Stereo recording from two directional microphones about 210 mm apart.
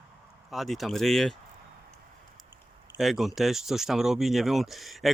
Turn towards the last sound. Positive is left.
turn(degrees=0)  # may be behind; listen again after turning